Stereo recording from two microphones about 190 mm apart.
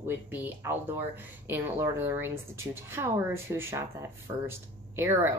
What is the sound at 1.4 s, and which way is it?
Speech, 10° right (ahead or behind).